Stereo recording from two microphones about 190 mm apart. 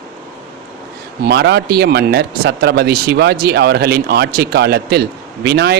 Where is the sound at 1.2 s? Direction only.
60° right (ahead or behind).